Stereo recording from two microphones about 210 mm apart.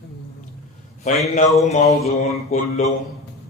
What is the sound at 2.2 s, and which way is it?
Mantra, 30° left (ahead or behind).